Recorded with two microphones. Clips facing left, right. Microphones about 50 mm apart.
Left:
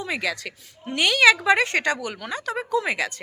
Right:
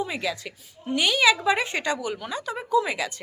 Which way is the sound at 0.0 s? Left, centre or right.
Left.